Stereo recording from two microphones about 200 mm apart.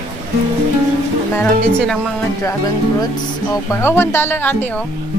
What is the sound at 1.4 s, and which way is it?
Speech, 5° left (ahead or behind).